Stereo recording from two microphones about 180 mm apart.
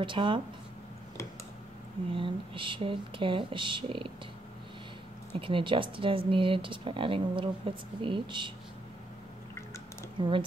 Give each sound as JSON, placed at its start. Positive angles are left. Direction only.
{"t": 0.0, "sound": "speech", "side_deg": -25}
{"t": 2.1, "sound": "speech", "side_deg": -30}
{"t": 5.4, "sound": "speech", "side_deg": -30}
{"t": 10.2, "sound": "speech", "side_deg": -25}